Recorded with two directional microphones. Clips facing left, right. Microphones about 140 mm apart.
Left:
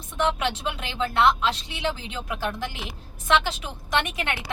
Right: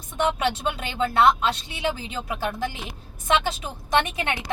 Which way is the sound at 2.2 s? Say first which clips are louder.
Right 2 dB; 20° right (ahead or behind).